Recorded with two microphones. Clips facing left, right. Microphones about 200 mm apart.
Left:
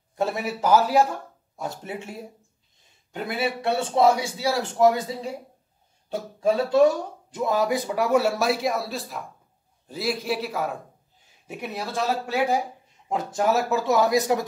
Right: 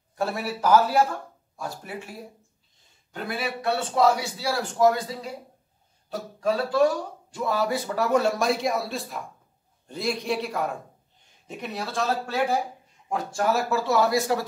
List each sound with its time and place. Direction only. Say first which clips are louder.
0.2 s speech: left 2 dB; 20° left (ahead or behind)
0.7 s a man's voice: left 1 dB; 10° left (ahead or behind)
1.6 s speech: left 2 dB; 25° left (ahead or behind)
4.0 s a man's voice: left 2 dB; 10° left (ahead or behind)
6.0 s a man's voice: left 3 dB; 25° left (ahead or behind); by 12.6 s 10° left (ahead or behind)
13.1 s speech: left 2 dB; 20° left (ahead or behind)